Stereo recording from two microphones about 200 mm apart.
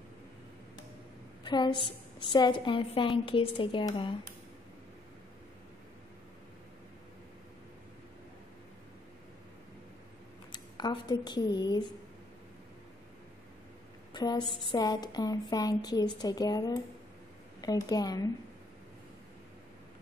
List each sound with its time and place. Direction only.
1.4 s a woman's voice: 20° left (ahead or behind)
10.5 s speech: 20° left (ahead or behind)
14.1 s a sound: 20° left (ahead or behind)
14.7 s a woman's voice: 20° left (ahead or behind)